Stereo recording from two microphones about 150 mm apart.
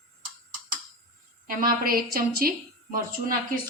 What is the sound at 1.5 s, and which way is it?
A woman's voice, 75° right (ahead or behind).